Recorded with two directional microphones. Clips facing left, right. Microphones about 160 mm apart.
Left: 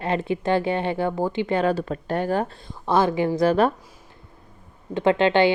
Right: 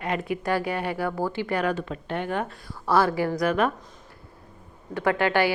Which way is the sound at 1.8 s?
40° left (ahead or behind).